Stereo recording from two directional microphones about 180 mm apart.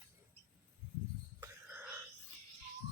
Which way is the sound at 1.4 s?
10° right (ahead or behind).